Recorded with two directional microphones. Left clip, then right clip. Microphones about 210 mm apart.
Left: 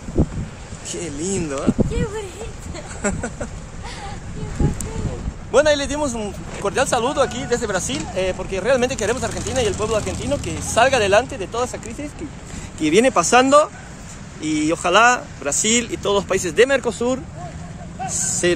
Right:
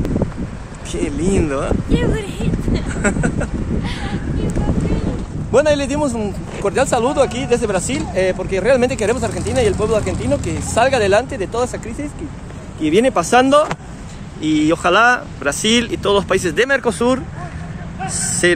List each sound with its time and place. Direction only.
0.9 s speech: centre (ahead or behind)
1.9 s speech: 45° left (ahead or behind)
2.9 s speech: centre (ahead or behind)
5.5 s speech: 5° left (ahead or behind)
12.8 s speech: 25° left (ahead or behind)
14.4 s speech: 5° left (ahead or behind)
18.4 s speech: 5° left (ahead or behind)